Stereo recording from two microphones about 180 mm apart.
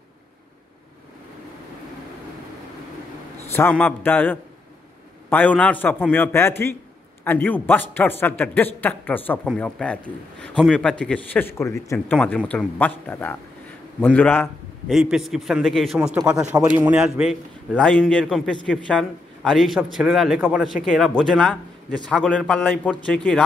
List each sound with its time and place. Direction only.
3.5 s a man's voice: 10° left (ahead or behind)
14.9 s speech: centre (ahead or behind)
16.6 s a man's voice: 15° right (ahead or behind)
16.9 s speech: 5° right (ahead or behind)